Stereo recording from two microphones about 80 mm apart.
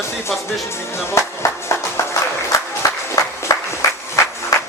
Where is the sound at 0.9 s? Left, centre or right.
Left.